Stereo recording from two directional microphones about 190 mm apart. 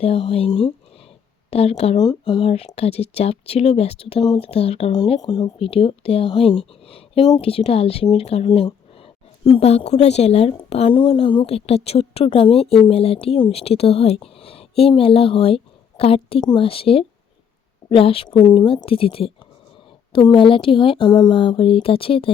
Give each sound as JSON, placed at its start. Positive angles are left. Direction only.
{"t": 0.0, "sound": "speech", "side_deg": 30}
{"t": 2.0, "sound": "speech", "side_deg": 20}